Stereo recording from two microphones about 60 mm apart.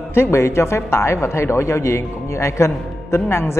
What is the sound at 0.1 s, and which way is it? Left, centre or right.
A man's voice, left.